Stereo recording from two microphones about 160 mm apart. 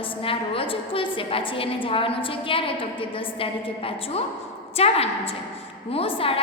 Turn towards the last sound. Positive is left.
turn(degrees=35)  # may be behind; listen again after turning